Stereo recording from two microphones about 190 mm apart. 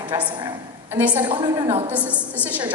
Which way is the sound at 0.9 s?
10° right (ahead or behind).